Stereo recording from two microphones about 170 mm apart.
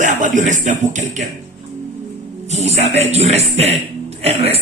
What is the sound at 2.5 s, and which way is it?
Speech, 40° right (ahead or behind).